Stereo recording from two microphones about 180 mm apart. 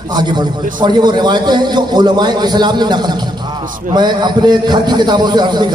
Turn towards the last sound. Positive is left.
turn(degrees=-25)  # may be behind; listen again after turning